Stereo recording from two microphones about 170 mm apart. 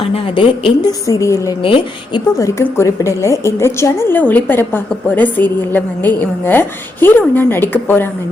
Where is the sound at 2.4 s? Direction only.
20° left (ahead or behind).